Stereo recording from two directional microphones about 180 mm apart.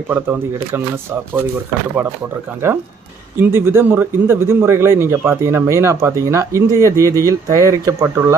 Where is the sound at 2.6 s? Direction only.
15° right (ahead or behind).